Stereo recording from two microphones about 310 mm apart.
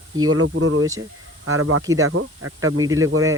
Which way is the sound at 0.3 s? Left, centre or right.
Right.